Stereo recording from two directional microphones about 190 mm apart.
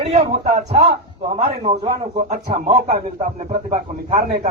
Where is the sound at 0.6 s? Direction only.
35° right (ahead or behind).